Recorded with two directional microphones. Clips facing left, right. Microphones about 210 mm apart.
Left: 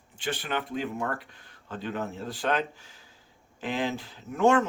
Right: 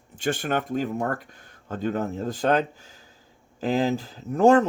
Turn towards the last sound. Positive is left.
turn(degrees=-35)  # may be behind; listen again after turning